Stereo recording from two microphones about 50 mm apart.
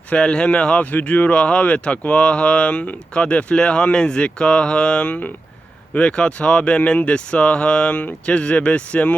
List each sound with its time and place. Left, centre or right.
0.2 s speech: centre
0.8 s speech: left
1.4 s speech: centre